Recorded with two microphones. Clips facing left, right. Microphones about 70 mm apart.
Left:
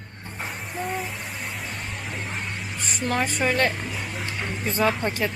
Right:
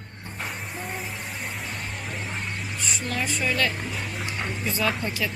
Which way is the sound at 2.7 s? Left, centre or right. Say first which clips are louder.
Right 1 dB; left.